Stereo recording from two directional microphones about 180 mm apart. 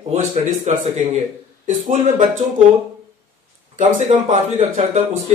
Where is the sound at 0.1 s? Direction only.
40° right (ahead or behind).